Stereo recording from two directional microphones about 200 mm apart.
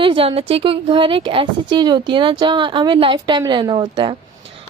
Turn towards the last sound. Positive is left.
turn(degrees=-25)  # may be behind; listen again after turning